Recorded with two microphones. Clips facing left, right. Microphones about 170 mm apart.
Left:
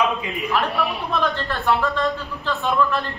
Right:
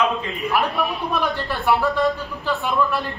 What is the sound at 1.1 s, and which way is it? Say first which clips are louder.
Speech: even; 15° right (ahead or behind).